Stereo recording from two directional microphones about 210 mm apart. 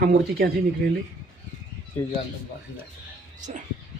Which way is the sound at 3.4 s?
35° right (ahead or behind).